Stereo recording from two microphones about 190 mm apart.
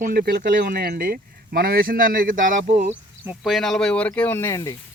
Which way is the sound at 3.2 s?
Centre (ahead or behind).